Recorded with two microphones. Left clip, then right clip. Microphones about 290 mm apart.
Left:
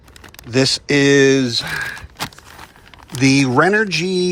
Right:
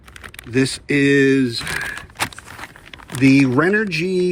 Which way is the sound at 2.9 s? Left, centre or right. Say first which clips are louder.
Right 1 dB; centre.